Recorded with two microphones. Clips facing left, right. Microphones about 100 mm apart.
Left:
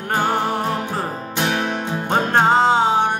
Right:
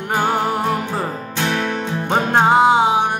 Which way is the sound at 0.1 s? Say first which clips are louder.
Right 1 dB; 10° right (ahead or behind).